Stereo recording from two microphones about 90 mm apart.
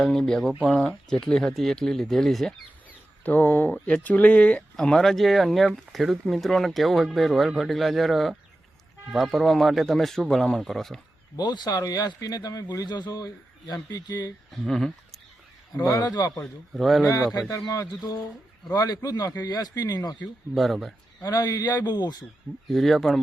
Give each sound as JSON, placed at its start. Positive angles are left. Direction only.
{"t": 0.0, "sound": "speech", "side_deg": 5}
{"t": 3.2, "sound": "speech", "side_deg": 20}
{"t": 11.3, "sound": "speech", "side_deg": 50}
{"t": 14.5, "sound": "speech", "side_deg": 5}
{"t": 15.7, "sound": "a man's voice", "side_deg": 40}
{"t": 16.7, "sound": "speech", "side_deg": 0}
{"t": 17.1, "sound": "a man's voice", "side_deg": 40}
{"t": 20.6, "sound": "speech", "side_deg": 0}
{"t": 21.2, "sound": "speech", "side_deg": 40}
{"t": 22.7, "sound": "speech", "side_deg": 0}